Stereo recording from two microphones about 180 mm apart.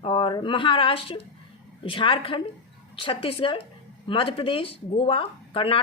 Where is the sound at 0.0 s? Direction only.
30° left (ahead or behind).